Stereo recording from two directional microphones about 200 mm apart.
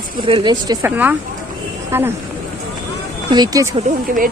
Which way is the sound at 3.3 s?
20° right (ahead or behind).